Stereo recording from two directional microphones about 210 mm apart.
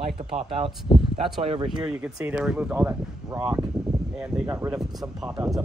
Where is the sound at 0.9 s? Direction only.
25° left (ahead or behind).